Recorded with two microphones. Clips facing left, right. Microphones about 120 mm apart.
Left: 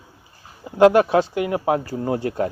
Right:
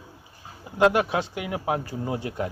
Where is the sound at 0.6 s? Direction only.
45° left (ahead or behind).